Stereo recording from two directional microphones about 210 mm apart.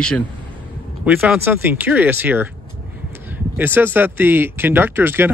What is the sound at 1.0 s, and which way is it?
Speech, 10° right (ahead or behind).